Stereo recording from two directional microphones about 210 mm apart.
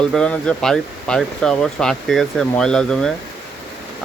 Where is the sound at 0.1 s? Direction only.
5° left (ahead or behind).